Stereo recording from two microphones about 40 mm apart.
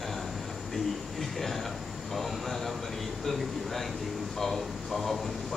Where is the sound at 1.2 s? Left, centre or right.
Centre.